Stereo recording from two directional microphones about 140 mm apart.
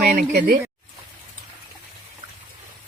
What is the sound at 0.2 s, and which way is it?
Speech, 90° right.